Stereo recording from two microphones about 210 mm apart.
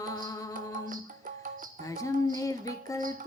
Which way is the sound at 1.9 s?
15° left (ahead or behind).